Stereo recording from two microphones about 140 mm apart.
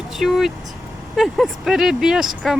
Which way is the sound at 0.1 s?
Centre (ahead or behind).